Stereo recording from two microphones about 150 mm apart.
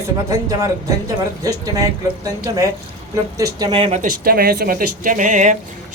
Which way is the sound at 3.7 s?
40° right (ahead or behind).